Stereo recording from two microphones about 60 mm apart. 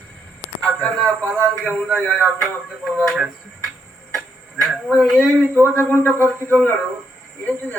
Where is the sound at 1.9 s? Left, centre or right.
Centre.